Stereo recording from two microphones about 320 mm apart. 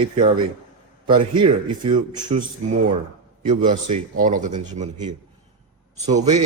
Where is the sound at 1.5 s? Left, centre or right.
Centre.